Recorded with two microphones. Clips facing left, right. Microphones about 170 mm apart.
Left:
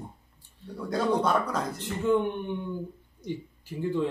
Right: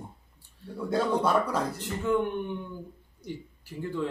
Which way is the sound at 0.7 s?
5° right (ahead or behind).